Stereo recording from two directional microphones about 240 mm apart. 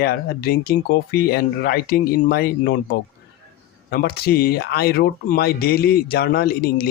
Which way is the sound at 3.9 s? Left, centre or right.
Left.